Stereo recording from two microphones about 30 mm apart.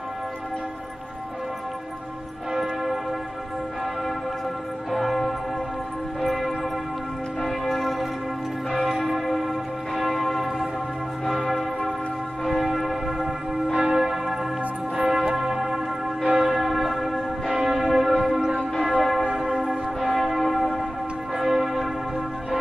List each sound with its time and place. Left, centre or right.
2.5 s church bell: centre
4.9 s church bell: centre
6.2 s a sound: centre
7.4 s church bell: centre
12.4 s church bell: centre
13.7 s church bell: right; by 17.2 s centre
17.5 s church bell: right
17.7 s church bell: centre
21.4 s church bell: centre